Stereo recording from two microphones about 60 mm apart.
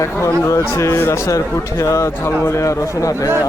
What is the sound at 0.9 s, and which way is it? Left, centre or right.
Speech, left.